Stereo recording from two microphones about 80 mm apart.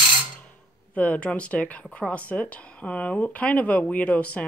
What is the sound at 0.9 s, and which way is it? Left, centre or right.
Speech, centre.